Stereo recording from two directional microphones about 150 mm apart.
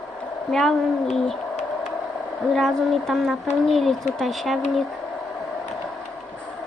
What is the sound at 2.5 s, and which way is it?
Speech, centre (ahead or behind).